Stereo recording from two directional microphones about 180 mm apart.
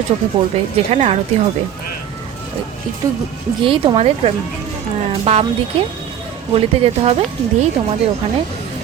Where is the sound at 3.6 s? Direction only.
30° right (ahead or behind).